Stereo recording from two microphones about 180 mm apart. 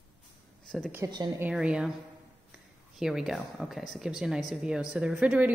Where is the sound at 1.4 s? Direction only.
5° right (ahead or behind).